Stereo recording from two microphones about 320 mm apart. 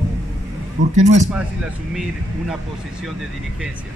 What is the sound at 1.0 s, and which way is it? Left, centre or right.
Speech, right.